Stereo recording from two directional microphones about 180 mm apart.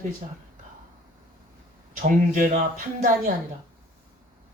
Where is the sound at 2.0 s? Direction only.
50° right (ahead or behind).